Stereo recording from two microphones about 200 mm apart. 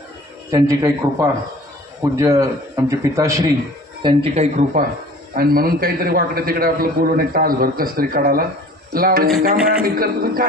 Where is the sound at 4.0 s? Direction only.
25° right (ahead or behind).